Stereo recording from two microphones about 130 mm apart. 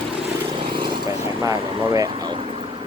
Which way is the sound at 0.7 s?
35° right (ahead or behind).